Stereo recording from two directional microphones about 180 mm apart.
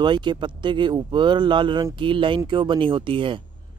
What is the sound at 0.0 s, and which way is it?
Speech, 25° right (ahead or behind).